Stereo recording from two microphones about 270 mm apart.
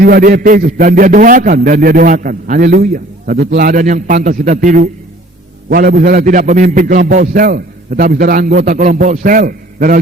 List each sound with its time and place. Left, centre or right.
0.0 s a man's voice: right